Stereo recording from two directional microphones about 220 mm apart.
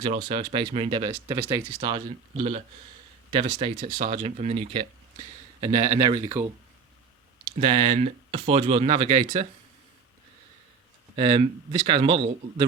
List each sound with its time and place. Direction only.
0.0 s speech: 25° right (ahead or behind)
3.8 s speech: 35° right (ahead or behind)
7.6 s speech: 25° right (ahead or behind)
11.2 s speech: 25° right (ahead or behind)